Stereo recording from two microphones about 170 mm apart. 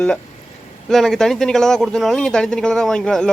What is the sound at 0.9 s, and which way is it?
A man's voice, centre (ahead or behind).